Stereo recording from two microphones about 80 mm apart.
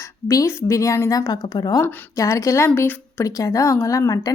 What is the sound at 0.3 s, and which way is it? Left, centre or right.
Speech, left.